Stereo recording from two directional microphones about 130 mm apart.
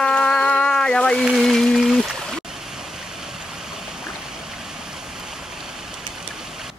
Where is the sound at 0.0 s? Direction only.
5° left (ahead or behind).